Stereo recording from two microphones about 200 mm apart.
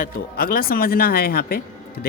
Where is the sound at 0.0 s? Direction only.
45° left (ahead or behind).